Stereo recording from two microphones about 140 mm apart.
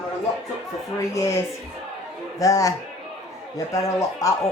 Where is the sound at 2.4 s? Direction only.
25° left (ahead or behind).